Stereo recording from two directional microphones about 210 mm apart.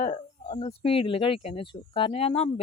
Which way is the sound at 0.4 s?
30° left (ahead or behind).